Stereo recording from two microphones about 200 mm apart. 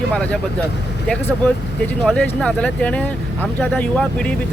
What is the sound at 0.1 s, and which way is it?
Speech, 5° left (ahead or behind).